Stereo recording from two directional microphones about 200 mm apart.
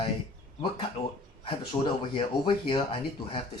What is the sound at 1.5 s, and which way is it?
Speech, 25° left (ahead or behind).